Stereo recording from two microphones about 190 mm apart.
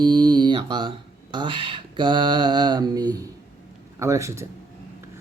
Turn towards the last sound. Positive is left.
turn(degrees=-15)  # may be behind; listen again after turning